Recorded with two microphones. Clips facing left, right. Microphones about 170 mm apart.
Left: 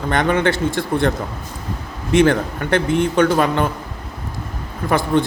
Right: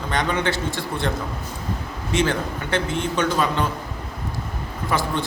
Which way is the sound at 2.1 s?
55° left (ahead or behind).